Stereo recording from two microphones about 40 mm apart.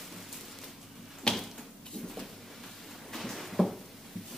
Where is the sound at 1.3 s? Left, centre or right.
Centre.